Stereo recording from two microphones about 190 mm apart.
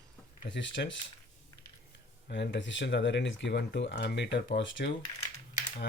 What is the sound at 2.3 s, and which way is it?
Speech, 65° left (ahead or behind).